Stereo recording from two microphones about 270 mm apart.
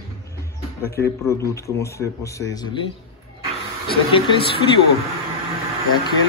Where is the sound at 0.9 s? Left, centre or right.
Centre.